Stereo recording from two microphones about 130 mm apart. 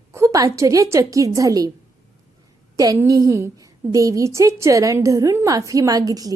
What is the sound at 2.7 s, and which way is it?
A woman's voice, 25° right (ahead or behind).